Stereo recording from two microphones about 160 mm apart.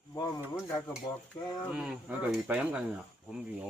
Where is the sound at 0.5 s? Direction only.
15° left (ahead or behind).